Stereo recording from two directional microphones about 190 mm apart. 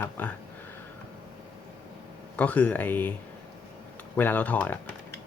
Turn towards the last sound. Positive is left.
turn(degrees=10)  # may be behind; listen again after turning